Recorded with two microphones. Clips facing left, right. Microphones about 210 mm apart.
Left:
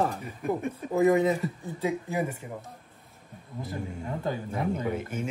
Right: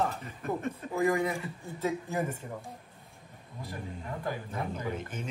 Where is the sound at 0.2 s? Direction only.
15° left (ahead or behind).